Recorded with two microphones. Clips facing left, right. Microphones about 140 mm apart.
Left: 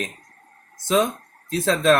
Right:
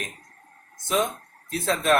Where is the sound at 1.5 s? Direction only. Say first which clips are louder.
Left 4 dB; 90° left.